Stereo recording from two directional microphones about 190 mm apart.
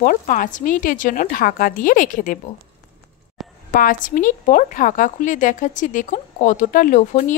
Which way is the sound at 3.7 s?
45° left (ahead or behind).